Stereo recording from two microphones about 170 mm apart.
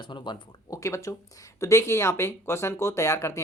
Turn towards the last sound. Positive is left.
turn(degrees=15)  # may be behind; listen again after turning